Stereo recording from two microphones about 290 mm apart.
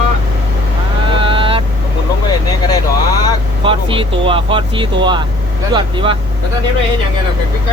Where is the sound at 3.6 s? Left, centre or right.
Centre.